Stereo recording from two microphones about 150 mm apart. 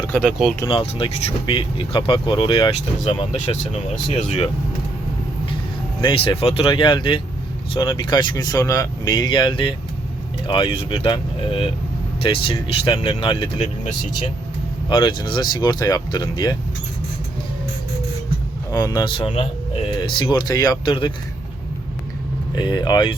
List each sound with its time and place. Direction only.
0.1 s speech: centre (ahead or behind)
0.7 s speech: 35° left (ahead or behind)
6.0 s speech: 35° left (ahead or behind)
14.8 s speech: 30° left (ahead or behind)
18.7 s speech: 25° left (ahead or behind)
22.5 s speech: 30° left (ahead or behind)